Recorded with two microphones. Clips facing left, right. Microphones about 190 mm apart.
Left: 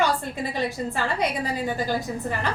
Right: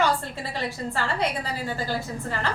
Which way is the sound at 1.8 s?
15° left (ahead or behind).